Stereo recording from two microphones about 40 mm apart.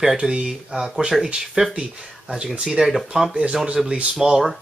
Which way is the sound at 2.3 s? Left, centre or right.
Centre.